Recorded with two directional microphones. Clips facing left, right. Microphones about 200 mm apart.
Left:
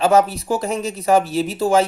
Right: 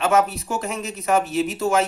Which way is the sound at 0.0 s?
35° left (ahead or behind).